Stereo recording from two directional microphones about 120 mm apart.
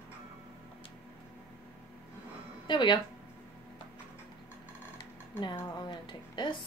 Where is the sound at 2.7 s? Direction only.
40° left (ahead or behind).